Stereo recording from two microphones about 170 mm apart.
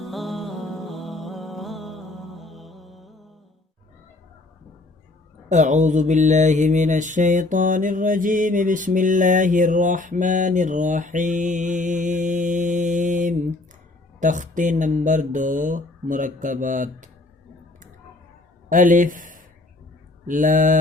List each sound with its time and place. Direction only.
0.0 s music: centre (ahead or behind)
5.5 s mantra: 45° right (ahead or behind)
18.7 s mantra: 50° right (ahead or behind)